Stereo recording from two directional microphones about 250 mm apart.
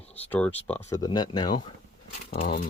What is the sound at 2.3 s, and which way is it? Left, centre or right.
Speech, left.